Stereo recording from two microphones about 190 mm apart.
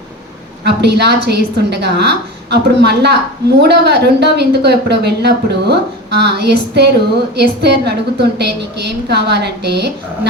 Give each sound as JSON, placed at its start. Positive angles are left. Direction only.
{"t": 0.6, "sound": "speech", "side_deg": -60}